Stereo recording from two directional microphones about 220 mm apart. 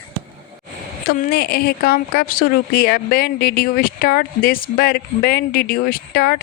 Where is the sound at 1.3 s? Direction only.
45° left (ahead or behind).